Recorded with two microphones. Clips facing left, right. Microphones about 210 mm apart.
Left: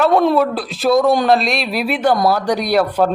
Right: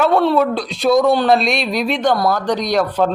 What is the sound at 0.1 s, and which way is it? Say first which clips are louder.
Speech: left 1 dB; 15° left (ahead or behind).